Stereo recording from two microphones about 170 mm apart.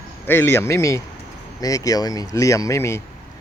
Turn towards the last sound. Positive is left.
turn(degrees=15)  # may be behind; listen again after turning